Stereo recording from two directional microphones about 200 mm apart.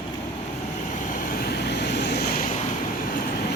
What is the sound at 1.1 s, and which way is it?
Vehicle, 50° left (ahead or behind).